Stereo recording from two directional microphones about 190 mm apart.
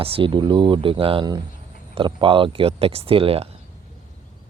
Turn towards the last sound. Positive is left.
turn(degrees=-30)  # may be behind; listen again after turning